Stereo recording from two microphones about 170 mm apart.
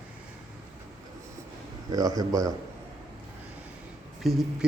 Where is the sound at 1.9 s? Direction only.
20° right (ahead or behind).